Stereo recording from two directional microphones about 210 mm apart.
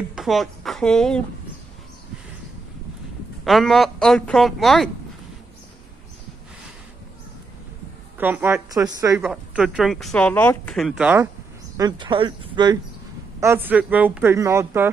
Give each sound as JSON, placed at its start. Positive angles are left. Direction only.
{"t": 0.1, "sound": "speech", "side_deg": 0}
{"t": 3.4, "sound": "a woman's voice", "side_deg": 0}
{"t": 8.2, "sound": "a woman's voice", "side_deg": -10}
{"t": 11.7, "sound": "speech", "side_deg": -20}